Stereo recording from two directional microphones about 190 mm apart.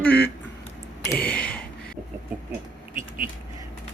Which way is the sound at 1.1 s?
5° left (ahead or behind).